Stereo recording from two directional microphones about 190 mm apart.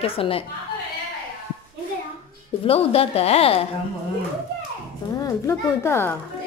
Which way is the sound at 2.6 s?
30° left (ahead or behind).